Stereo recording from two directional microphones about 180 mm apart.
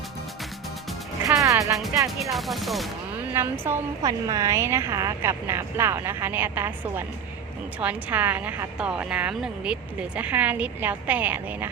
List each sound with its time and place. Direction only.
1.3 s music: 15° right (ahead or behind)
2.3 s speech: centre (ahead or behind)
3.3 s speech: 10° right (ahead or behind)